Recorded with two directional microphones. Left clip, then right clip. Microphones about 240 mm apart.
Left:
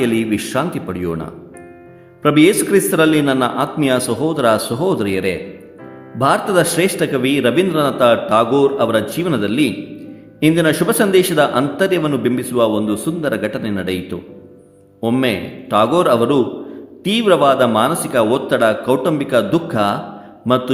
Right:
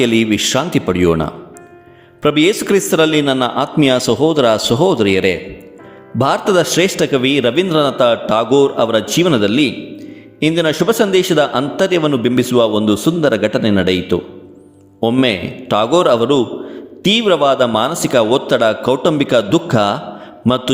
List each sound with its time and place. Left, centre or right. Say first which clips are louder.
0.0 s a man's voice: right 4 dB; right